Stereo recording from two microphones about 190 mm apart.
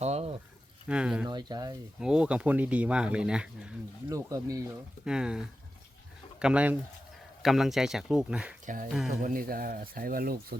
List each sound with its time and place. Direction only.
0.0 s a sound: 35° right (ahead or behind)
0.9 s speech: 5° right (ahead or behind)
1.3 s speech: 20° right (ahead or behind)
2.0 s speech: 5° right (ahead or behind)
4.1 s speech: 15° right (ahead or behind)
5.0 s speech: 5° right (ahead or behind)
8.6 s speech: 45° right (ahead or behind)
8.9 s speech: centre (ahead or behind)
9.2 s speech: 50° right (ahead or behind)